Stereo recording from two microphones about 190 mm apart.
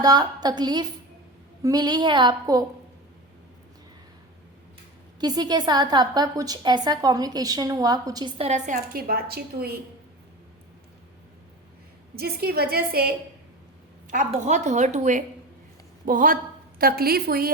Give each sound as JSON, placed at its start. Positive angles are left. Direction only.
{"t": 0.0, "sound": "a woman's voice", "side_deg": -20}
{"t": 5.2, "sound": "a woman's voice", "side_deg": -20}
{"t": 8.4, "sound": "a woman's voice", "side_deg": -40}
{"t": 12.1, "sound": "a woman's voice", "side_deg": -55}
{"t": 14.1, "sound": "a woman's voice", "side_deg": -40}